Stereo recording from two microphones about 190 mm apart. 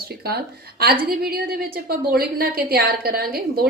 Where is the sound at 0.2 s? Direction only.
55° right (ahead or behind).